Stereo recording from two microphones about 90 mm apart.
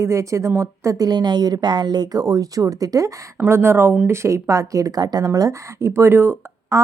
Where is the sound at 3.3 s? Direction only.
25° right (ahead or behind).